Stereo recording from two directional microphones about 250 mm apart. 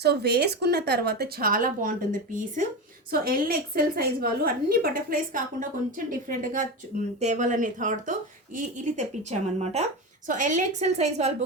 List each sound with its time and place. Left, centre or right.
0.0 s a woman's voice: right